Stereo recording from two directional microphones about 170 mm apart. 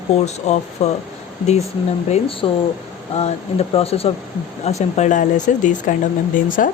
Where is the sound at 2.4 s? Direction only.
30° left (ahead or behind).